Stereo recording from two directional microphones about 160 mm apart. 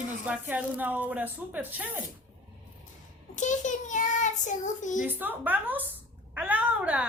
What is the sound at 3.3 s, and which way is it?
A child's voice, 50° left (ahead or behind).